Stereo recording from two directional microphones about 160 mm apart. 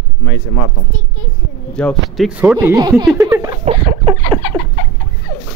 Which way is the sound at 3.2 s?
20° right (ahead or behind).